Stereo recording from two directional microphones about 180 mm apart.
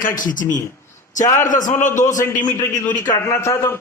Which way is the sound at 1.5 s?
45° left (ahead or behind).